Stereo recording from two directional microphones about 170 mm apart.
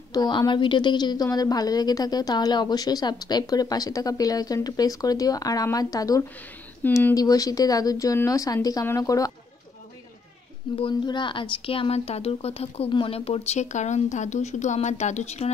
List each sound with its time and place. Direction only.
0.1 s a woman's voice: 25° left (ahead or behind)
10.8 s speech: 30° left (ahead or behind)